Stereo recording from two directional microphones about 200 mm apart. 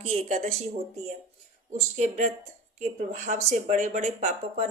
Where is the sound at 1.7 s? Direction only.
35° right (ahead or behind).